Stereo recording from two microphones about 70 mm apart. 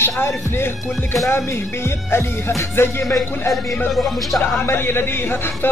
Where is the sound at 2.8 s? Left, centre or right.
Left.